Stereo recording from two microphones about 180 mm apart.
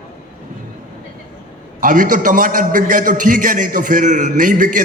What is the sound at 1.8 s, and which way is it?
A man's voice, 45° right (ahead or behind).